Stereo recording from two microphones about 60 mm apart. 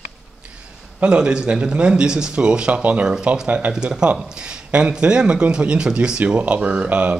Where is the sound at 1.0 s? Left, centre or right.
Right.